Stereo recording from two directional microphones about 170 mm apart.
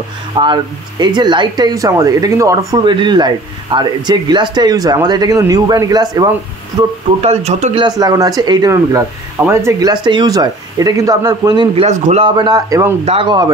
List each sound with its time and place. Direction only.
0.4 s speech: 25° right (ahead or behind)
7.2 s speech: 40° right (ahead or behind)
7.8 s speech: 20° right (ahead or behind)
13.0 s speech: 40° right (ahead or behind)